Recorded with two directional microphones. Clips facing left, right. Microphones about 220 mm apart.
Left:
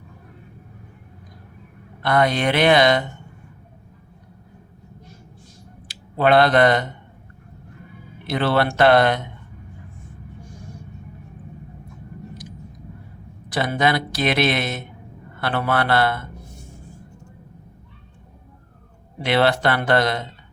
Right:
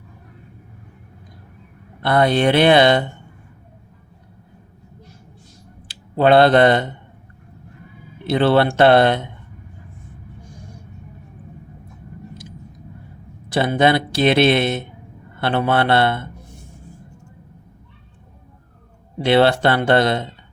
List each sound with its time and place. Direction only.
2.0 s speech: 30° right (ahead or behind)
6.1 s speech: 30° right (ahead or behind)
8.3 s speech: 25° right (ahead or behind)
13.5 s speech: 25° right (ahead or behind)
19.2 s speech: 30° right (ahead or behind)